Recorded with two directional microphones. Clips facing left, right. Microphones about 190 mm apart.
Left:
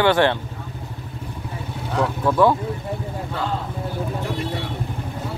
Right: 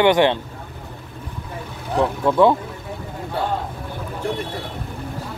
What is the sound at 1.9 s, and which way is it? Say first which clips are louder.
Speech: right 2 dB; 20° right (ahead or behind).